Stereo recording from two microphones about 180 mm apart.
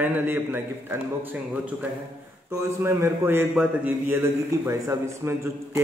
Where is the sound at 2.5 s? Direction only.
15° right (ahead or behind).